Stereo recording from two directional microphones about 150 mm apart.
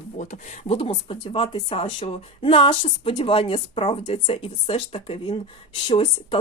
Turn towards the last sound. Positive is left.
turn(degrees=30)  # may be behind; listen again after turning